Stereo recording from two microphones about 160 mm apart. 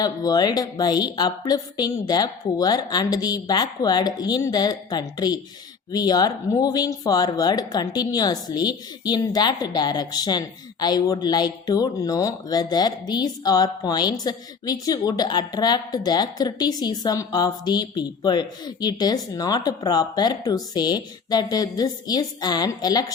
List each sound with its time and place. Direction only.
0.0 s speech: 25° left (ahead or behind)